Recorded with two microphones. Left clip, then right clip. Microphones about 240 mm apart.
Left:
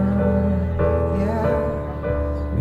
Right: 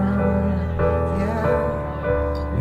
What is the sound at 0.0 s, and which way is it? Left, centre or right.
Music, centre.